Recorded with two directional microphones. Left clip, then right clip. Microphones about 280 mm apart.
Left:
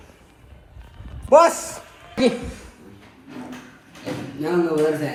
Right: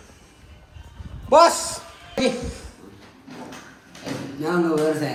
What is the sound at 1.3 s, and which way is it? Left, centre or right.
Speech, centre.